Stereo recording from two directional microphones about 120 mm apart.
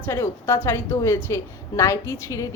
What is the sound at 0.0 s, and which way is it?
A woman's voice, 20° left (ahead or behind).